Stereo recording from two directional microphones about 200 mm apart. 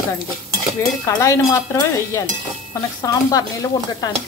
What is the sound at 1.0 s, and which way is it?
A woman's voice, 15° left (ahead or behind).